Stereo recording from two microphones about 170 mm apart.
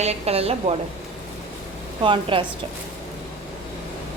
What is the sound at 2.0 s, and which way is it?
Speech, 30° right (ahead or behind).